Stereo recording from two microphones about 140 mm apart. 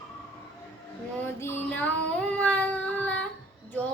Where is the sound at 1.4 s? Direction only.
15° left (ahead or behind).